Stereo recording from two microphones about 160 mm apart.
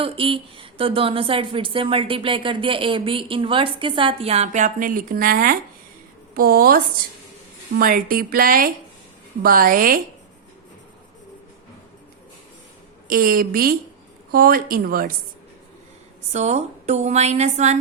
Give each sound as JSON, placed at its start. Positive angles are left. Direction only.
{"t": 0.0, "sound": "speech", "side_deg": -35}
{"t": 13.1, "sound": "speech", "side_deg": -65}
{"t": 16.3, "sound": "a woman's voice", "side_deg": -45}